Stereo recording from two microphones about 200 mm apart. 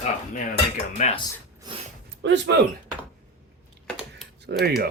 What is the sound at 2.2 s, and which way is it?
Speech, 60° right (ahead or behind).